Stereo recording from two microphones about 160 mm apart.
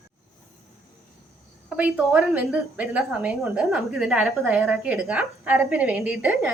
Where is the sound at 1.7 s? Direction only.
10° right (ahead or behind).